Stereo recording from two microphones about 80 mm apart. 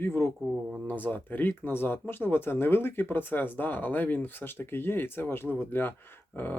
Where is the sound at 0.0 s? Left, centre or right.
Left.